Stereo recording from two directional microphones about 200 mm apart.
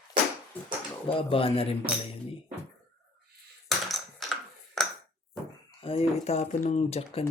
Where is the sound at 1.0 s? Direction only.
25° left (ahead or behind).